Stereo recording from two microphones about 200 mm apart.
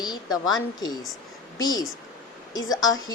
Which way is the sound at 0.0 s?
20° left (ahead or behind).